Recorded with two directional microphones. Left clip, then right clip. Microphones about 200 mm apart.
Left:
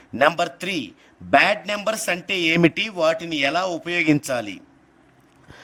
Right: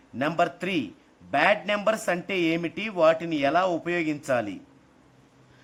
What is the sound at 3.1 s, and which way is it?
Speech, 55° left (ahead or behind).